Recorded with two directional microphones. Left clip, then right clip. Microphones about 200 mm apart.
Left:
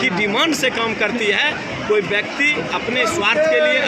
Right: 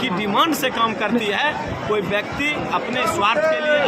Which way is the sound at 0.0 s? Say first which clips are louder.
Left 2 dB; 10° right (ahead or behind).